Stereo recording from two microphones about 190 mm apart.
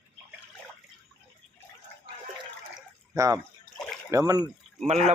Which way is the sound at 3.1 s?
15° right (ahead or behind).